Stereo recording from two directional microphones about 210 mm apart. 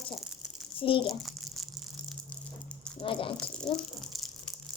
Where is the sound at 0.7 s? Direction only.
25° left (ahead or behind).